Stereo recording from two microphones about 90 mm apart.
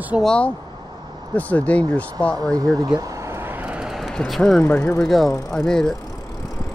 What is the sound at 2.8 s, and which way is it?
Vehicle, 40° right (ahead or behind).